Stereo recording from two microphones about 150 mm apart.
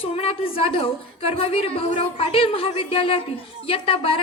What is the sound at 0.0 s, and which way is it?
A woman's voice, 40° left (ahead or behind).